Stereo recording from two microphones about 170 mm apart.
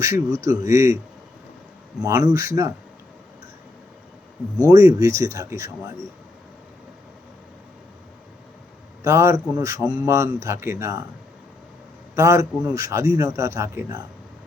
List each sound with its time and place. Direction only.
0.0 s a man's voice: 15° right (ahead or behind)
2.0 s speech: 20° right (ahead or behind)
4.7 s speech: 20° right (ahead or behind)
9.0 s a man's voice: 15° right (ahead or behind)
12.1 s a man's voice: 15° right (ahead or behind)